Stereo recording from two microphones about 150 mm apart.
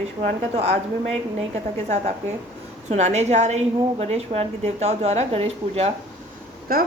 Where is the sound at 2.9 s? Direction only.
50° right (ahead or behind).